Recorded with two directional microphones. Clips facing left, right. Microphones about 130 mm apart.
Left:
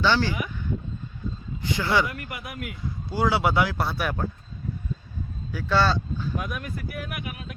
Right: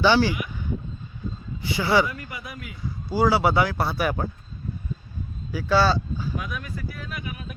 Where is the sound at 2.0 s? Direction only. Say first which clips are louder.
Even; 65° left (ahead or behind).